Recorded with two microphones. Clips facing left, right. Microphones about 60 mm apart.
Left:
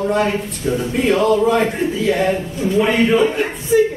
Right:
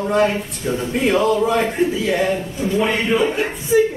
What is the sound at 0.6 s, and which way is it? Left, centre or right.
Speech, centre.